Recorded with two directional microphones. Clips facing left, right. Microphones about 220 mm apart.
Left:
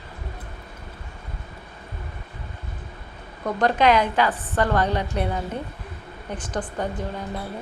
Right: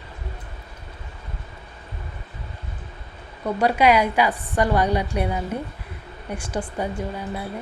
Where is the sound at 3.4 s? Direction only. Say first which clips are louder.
Right 1 dB; 10° right (ahead or behind).